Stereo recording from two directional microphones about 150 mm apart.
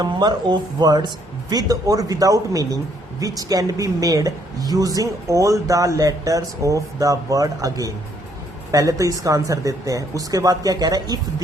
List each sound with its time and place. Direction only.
0.0 s speech: 30° right (ahead or behind)